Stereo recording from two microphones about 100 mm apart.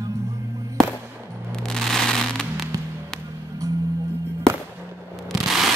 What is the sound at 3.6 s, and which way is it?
Music, 35° right (ahead or behind).